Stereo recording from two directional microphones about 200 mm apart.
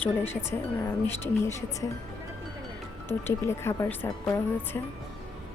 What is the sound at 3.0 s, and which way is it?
Speech, 10° left (ahead or behind).